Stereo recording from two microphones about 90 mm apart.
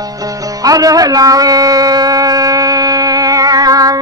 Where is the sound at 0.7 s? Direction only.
40° right (ahead or behind).